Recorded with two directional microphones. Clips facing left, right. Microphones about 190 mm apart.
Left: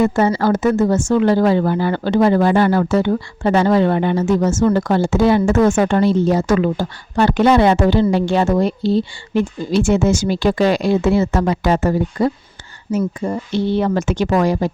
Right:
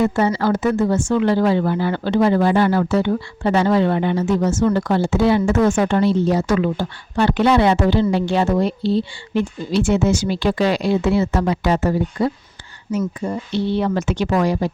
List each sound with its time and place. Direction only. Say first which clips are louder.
0.0 s speech: left 2 dB; 45° left (ahead or behind)